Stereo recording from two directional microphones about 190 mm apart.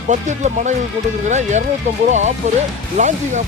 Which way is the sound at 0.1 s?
40° right (ahead or behind).